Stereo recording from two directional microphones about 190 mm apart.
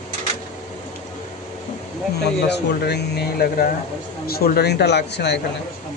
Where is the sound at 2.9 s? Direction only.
60° left (ahead or behind).